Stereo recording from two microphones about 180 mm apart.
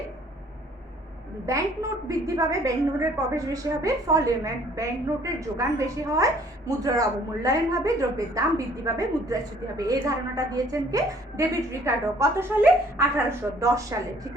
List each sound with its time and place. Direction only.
1.5 s a woman's voice: 20° right (ahead or behind)